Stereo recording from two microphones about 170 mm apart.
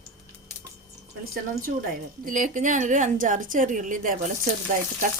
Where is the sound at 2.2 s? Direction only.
50° right (ahead or behind).